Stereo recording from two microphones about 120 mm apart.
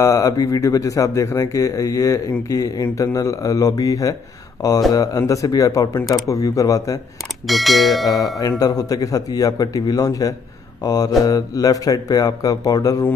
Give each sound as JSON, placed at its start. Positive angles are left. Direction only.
{"t": 0.0, "sound": "speech", "side_deg": 25}
{"t": 7.4, "sound": "speech", "side_deg": 0}
{"t": 8.4, "sound": "speech", "side_deg": 30}